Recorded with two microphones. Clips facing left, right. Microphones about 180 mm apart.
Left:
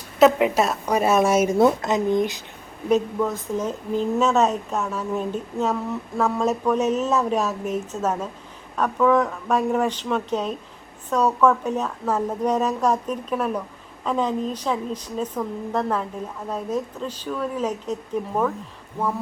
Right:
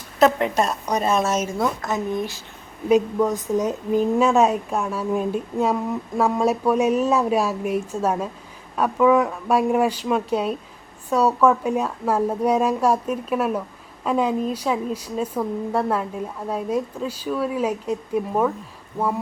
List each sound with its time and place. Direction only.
0.2 s a woman's voice: 5° left (ahead or behind)
1.5 s a woman's voice: 25° left (ahead or behind)
2.9 s a woman's voice: 15° right (ahead or behind)